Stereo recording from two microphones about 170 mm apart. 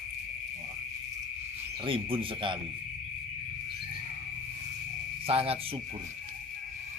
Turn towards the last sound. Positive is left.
turn(degrees=-35)  # may be behind; listen again after turning